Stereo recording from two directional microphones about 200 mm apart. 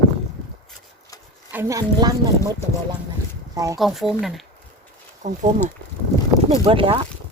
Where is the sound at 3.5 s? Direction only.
15° right (ahead or behind).